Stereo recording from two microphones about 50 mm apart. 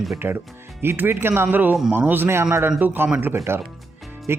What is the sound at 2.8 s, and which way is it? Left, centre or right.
Speech, right.